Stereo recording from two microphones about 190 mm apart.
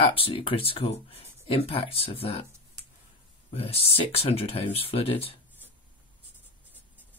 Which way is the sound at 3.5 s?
30° left (ahead or behind).